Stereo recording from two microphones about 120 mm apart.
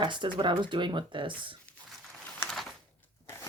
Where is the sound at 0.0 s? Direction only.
40° right (ahead or behind).